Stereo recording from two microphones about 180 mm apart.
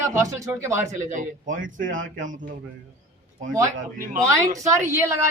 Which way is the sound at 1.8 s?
90° right.